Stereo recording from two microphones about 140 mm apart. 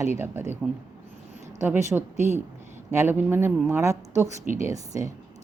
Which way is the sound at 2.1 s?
55° right (ahead or behind).